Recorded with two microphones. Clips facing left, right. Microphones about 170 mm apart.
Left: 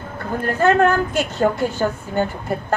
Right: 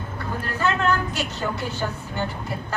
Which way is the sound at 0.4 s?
50° left (ahead or behind).